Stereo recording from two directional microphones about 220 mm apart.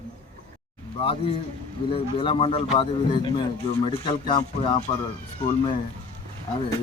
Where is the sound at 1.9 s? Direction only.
25° left (ahead or behind).